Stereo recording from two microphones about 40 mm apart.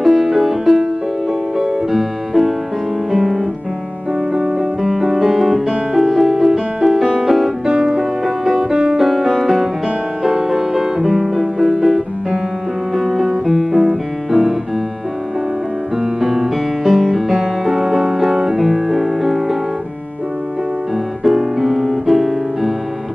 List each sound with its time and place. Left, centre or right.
0.0 s music: centre
4.3 s music: centre
7.6 s music: centre
9.0 s music: centre
13.1 s music: centre
16.0 s music: centre
21.2 s piano: centre